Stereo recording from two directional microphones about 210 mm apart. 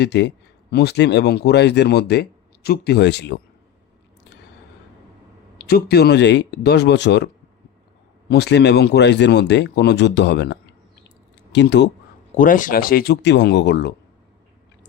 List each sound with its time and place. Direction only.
0.0 s speech: 55° left (ahead or behind)
5.5 s speech: 50° left (ahead or behind)
8.3 s speech: 50° left (ahead or behind)
12.4 s speech: 40° left (ahead or behind); by 13.9 s 55° left (ahead or behind)